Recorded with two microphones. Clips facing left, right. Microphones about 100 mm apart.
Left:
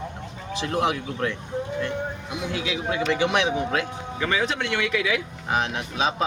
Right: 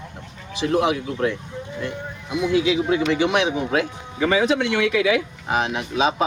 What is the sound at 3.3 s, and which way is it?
Speech, 15° right (ahead or behind).